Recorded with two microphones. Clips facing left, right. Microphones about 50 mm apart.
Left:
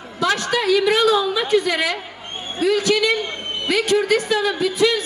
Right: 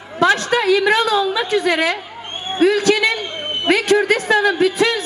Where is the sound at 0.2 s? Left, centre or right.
Right.